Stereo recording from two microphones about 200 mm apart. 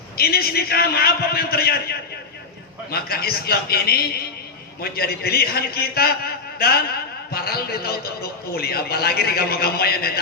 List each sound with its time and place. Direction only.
0.2 s a man's voice: 50° left (ahead or behind)